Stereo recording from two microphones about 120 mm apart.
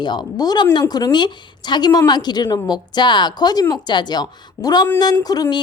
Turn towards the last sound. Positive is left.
turn(degrees=35)  # may be behind; listen again after turning